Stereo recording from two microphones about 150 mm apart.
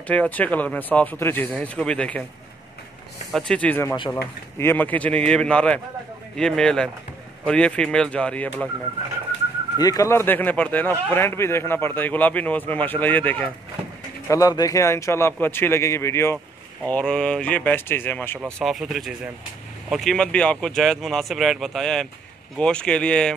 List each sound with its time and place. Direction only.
0.0 s a man's voice: 10° left (ahead or behind)
3.3 s a man's voice: 5° left (ahead or behind)
9.8 s a man's voice: 25° left (ahead or behind)
14.2 s a man's voice: 20° left (ahead or behind)
16.8 s a man's voice: 5° left (ahead or behind)
18.4 s a man's voice: centre (ahead or behind)